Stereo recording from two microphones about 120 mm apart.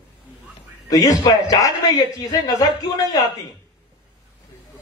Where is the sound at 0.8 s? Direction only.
30° left (ahead or behind).